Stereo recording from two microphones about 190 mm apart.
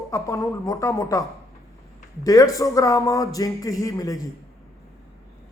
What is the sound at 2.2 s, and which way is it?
Speech, 15° left (ahead or behind).